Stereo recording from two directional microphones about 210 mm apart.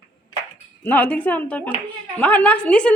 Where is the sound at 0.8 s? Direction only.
10° left (ahead or behind).